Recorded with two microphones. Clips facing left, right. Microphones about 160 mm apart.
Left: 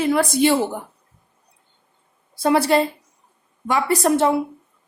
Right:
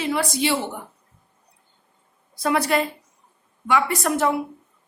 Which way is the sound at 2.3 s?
30° left (ahead or behind).